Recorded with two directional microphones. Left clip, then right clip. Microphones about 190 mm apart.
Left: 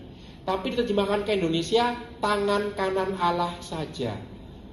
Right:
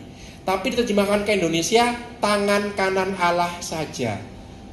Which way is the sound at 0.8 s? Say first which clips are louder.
Right 4 dB; 30° right (ahead or behind).